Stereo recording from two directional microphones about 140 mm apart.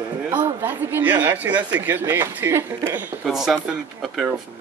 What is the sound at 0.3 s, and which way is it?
Speech, 10° right (ahead or behind).